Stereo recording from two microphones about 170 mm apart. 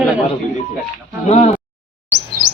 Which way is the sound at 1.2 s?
40° left (ahead or behind).